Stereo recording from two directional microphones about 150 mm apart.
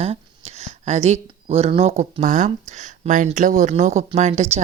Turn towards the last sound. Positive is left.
turn(degrees=-50)  # may be behind; listen again after turning